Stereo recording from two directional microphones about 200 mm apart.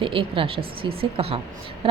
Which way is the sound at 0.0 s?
25° right (ahead or behind).